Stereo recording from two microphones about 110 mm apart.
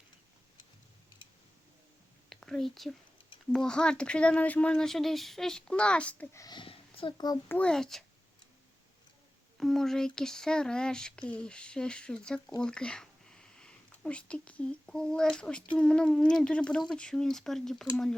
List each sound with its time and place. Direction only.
2.3 s speech: centre (ahead or behind)
6.3 s speech: 35° left (ahead or behind)
6.6 s a sound: 55° left (ahead or behind)
7.6 s speech: 5° left (ahead or behind)
9.6 s speech: 5° left (ahead or behind)